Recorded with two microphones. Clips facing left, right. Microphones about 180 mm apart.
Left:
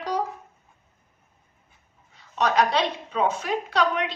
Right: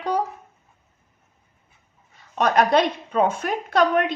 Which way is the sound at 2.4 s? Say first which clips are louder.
Right 4 dB; 55° right (ahead or behind).